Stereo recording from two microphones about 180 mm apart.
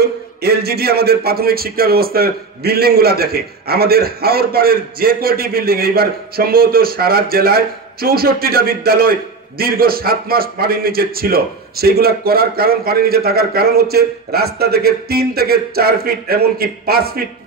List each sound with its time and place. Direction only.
0.0 s a man's voice: 60° right (ahead or behind)